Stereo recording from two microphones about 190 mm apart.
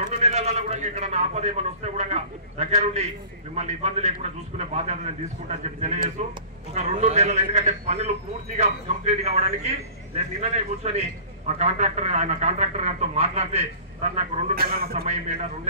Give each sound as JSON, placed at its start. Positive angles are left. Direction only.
{"t": 0.1, "sound": "a man's voice", "side_deg": -35}
{"t": 14.5, "sound": "a man's voice", "side_deg": -50}
{"t": 15.0, "sound": "a man's voice", "side_deg": -35}